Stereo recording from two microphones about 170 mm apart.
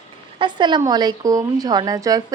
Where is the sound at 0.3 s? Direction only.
25° right (ahead or behind).